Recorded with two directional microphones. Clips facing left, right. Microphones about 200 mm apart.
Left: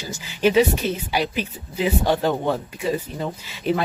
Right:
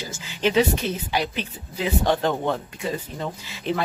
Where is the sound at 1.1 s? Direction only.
10° left (ahead or behind).